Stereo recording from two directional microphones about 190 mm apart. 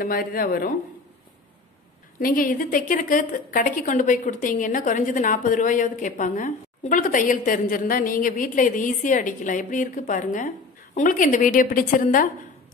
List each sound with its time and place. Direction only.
0.0 s a woman's voice: 50° left (ahead or behind)
2.1 s a woman's voice: 45° left (ahead or behind)